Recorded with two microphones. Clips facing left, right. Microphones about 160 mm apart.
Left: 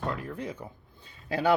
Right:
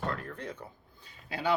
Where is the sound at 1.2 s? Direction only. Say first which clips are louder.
Left 6 dB; 45° left (ahead or behind).